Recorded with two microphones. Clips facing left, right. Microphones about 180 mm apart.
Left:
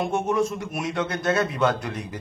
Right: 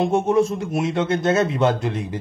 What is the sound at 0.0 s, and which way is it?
Speech, 30° right (ahead or behind).